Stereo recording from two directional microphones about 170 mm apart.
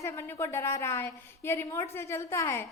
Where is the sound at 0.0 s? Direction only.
15° left (ahead or behind).